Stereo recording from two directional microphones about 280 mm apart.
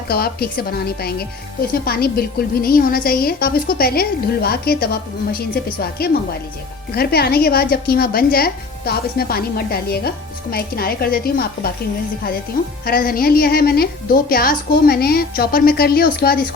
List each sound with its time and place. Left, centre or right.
0.1 s a woman's voice: left
12.8 s a woman's voice: left